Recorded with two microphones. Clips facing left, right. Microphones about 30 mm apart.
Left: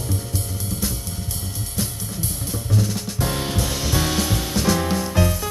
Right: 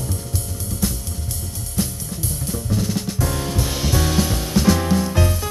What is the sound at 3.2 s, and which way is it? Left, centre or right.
Drum kit, left.